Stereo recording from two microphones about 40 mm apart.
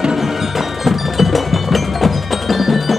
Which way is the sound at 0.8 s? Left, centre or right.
Centre.